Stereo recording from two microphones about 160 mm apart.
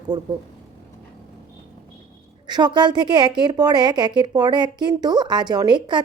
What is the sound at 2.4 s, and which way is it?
A woman's voice, 25° right (ahead or behind).